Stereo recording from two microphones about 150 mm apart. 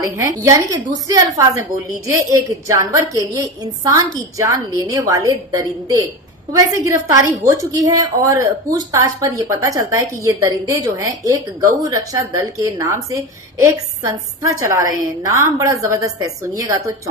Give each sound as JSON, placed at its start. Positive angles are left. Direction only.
{"t": 0.0, "sound": "a woman's voice", "side_deg": -20}